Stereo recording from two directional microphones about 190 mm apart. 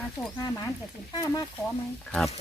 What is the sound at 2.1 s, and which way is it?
Speech, centre (ahead or behind).